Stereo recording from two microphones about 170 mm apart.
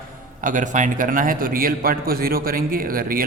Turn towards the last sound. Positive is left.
turn(degrees=-55)  # may be behind; listen again after turning